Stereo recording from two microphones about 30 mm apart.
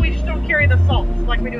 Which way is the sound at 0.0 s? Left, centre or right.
Centre.